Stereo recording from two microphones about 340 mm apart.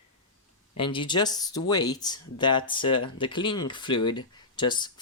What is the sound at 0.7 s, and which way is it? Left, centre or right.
Speech, centre.